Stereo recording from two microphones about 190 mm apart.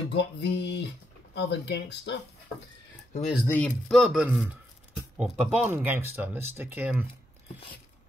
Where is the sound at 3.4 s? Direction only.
5° left (ahead or behind); by 7.0 s 10° right (ahead or behind).